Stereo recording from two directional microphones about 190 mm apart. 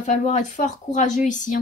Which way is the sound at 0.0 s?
40° left (ahead or behind).